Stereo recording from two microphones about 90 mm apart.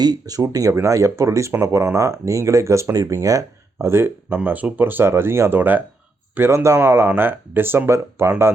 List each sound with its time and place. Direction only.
0.0 s speech: 45° right (ahead or behind); by 8.5 s 25° right (ahead or behind)